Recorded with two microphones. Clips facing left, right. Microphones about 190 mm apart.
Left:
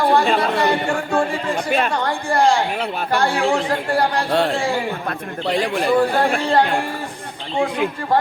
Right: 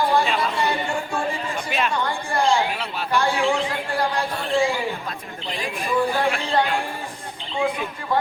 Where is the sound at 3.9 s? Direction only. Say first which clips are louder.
Left 6 dB; 75° left (ahead or behind).